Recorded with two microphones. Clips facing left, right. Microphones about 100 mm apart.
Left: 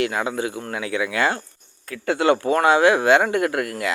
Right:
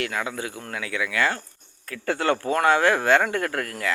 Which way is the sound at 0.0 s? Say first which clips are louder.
Left 6 dB; 20° left (ahead or behind).